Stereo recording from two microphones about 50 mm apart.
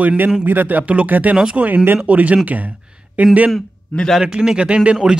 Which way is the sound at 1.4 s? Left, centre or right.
Centre.